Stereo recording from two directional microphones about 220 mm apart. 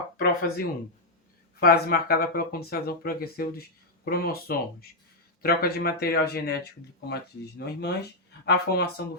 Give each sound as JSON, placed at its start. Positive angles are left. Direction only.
{"t": 0.2, "sound": "speech", "side_deg": 45}
{"t": 7.6, "sound": "speech", "side_deg": 50}